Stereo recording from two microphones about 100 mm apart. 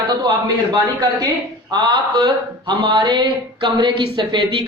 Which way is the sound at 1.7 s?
45° right (ahead or behind).